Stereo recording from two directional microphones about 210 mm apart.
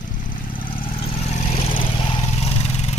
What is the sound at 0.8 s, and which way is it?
Vehicle, 25° left (ahead or behind).